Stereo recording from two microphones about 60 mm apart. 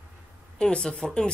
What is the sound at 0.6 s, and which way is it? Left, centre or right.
Speech, centre.